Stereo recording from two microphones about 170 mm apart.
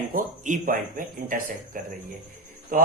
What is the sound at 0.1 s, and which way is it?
A man's voice, 50° right (ahead or behind).